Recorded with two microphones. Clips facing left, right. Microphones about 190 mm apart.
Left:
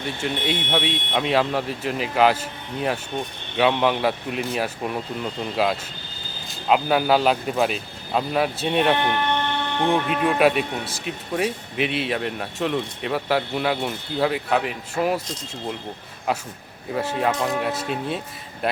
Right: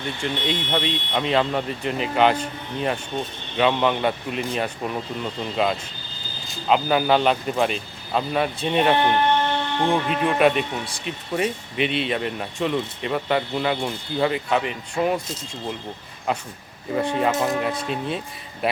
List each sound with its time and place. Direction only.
0.2 s speech: 5° left (ahead or behind)
9.0 s speech: 35° right (ahead or behind)
9.9 s speech: centre (ahead or behind)
16.9 s speech: centre (ahead or behind)